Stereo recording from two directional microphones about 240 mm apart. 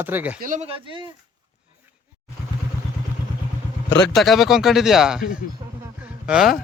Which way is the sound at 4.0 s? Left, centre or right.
Centre.